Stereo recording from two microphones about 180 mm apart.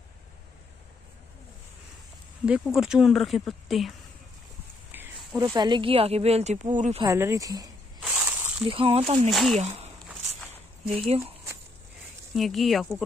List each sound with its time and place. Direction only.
2.4 s speech: 5° right (ahead or behind)
4.9 s a sound: 10° right (ahead or behind)
5.4 s speech: 25° right (ahead or behind); by 7.0 s 45° right (ahead or behind)
7.0 s speech: 20° right (ahead or behind)
8.1 s snake: 10° right (ahead or behind)
8.6 s speech: 30° right (ahead or behind)
9.3 s speech: centre (ahead or behind)
9.6 s speech: 35° right (ahead or behind)
11.1 s speech: 30° right (ahead or behind)
12.4 s speech: centre (ahead or behind)